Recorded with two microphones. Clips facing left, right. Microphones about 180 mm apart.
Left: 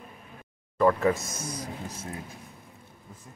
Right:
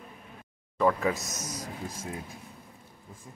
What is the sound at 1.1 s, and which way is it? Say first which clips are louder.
Speech: left 2 dB; 40° right (ahead or behind).